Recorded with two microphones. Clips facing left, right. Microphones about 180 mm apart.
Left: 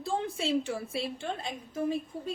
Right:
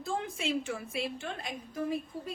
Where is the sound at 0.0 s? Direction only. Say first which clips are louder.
Left 3 dB; 30° left (ahead or behind).